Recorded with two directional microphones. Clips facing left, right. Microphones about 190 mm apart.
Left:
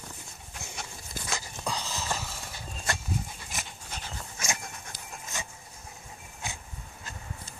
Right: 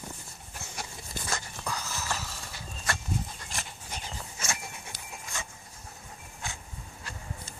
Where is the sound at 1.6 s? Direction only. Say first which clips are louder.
Left 2 dB; 20° left (ahead or behind).